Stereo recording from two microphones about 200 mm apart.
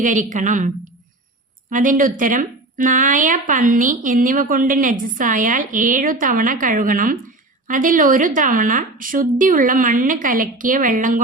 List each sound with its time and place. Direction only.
0.0 s a woman's voice: 40° right (ahead or behind)
1.7 s a woman's voice: 40° right (ahead or behind)